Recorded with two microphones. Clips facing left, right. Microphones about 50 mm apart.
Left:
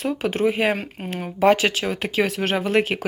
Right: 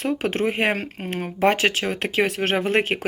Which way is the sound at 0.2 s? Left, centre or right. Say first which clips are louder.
Left 2 dB; right.